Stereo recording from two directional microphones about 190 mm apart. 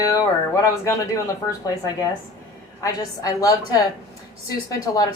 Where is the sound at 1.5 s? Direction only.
15° left (ahead or behind).